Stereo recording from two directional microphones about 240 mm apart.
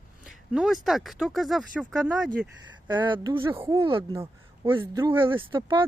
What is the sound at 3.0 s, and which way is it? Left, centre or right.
Speech, centre.